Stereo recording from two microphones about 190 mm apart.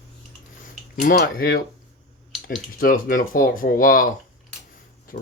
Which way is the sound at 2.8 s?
45° left (ahead or behind).